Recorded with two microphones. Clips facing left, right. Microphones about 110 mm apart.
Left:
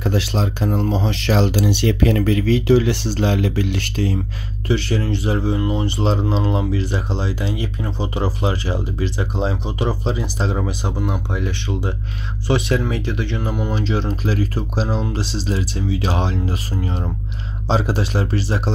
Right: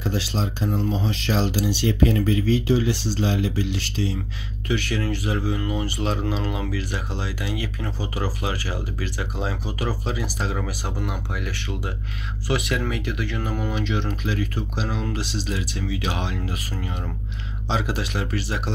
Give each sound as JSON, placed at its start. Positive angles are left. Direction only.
{"t": 0.0, "sound": "speech", "side_deg": 65}
{"t": 4.6, "sound": "speech", "side_deg": 30}